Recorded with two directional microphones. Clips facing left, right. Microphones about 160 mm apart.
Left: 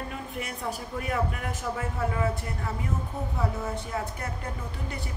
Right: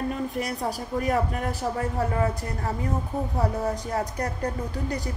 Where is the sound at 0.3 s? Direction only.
35° right (ahead or behind).